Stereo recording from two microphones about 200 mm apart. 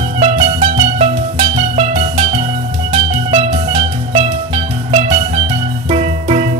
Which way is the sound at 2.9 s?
30° right (ahead or behind).